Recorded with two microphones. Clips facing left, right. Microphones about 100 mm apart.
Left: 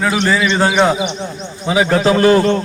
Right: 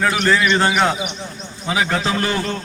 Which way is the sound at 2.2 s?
40° left (ahead or behind).